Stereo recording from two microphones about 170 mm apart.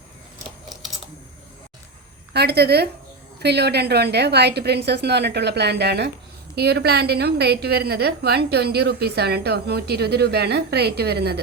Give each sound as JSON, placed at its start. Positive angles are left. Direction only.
{"t": 0.7, "sound": "typing", "side_deg": 0}
{"t": 2.3, "sound": "a woman's voice", "side_deg": -75}